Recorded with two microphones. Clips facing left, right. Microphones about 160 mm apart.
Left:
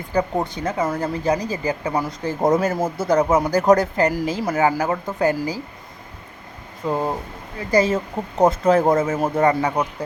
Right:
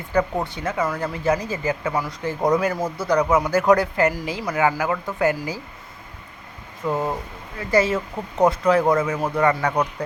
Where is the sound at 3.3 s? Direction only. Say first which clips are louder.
Even; 40° left (ahead or behind).